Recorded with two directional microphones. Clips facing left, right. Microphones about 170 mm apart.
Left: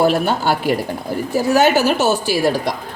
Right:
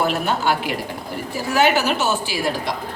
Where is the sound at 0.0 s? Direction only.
35° left (ahead or behind).